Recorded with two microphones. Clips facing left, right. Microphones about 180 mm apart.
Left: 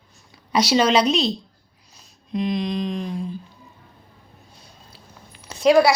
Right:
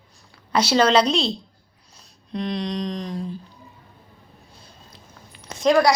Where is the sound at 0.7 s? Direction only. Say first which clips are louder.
Right 1 dB; 10° left (ahead or behind).